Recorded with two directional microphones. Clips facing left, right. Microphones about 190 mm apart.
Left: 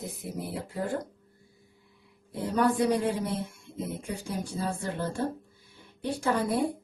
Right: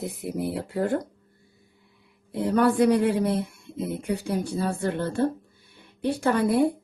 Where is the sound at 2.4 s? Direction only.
65° right (ahead or behind).